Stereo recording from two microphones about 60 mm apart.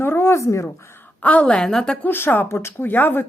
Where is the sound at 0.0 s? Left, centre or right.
Left.